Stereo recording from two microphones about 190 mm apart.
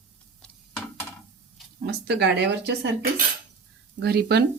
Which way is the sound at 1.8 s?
60° right (ahead or behind).